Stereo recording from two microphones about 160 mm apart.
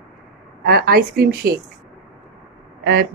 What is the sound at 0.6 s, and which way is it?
A woman's voice, 75° right (ahead or behind).